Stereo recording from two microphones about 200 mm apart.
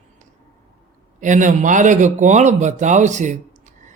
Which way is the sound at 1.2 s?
40° right (ahead or behind).